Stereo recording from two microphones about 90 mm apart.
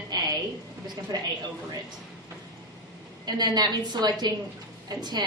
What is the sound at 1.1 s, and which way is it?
Speech, 40° right (ahead or behind).